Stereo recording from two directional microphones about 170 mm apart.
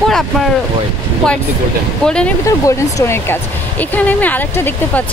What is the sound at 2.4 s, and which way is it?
Speech, 15° left (ahead or behind).